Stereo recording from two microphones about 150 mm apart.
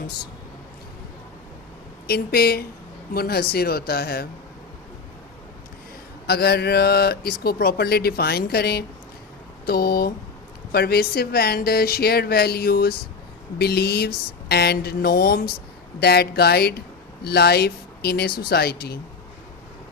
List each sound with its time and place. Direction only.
2.0 s speech: 90° left
6.2 s speech: 90° left